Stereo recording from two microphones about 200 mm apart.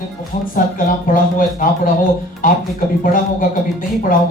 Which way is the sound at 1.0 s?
45° left (ahead or behind).